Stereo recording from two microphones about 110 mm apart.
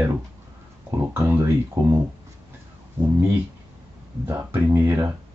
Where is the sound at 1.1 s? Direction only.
25° right (ahead or behind).